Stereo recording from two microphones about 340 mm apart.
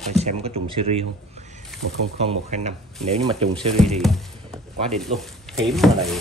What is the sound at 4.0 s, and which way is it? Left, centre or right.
Speech, centre.